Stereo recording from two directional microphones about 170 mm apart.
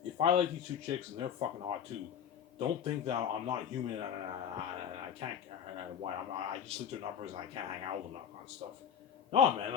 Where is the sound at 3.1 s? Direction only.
35° right (ahead or behind).